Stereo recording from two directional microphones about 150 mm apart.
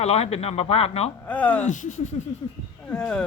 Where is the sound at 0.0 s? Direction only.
45° left (ahead or behind).